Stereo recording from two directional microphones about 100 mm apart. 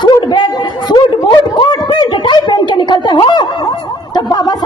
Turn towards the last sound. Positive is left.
turn(degrees=45)  # may be behind; listen again after turning